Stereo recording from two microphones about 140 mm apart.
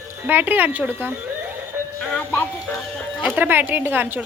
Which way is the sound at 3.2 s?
10° right (ahead or behind).